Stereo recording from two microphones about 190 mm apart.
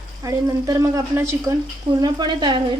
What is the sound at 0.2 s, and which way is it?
Speech, 20° right (ahead or behind).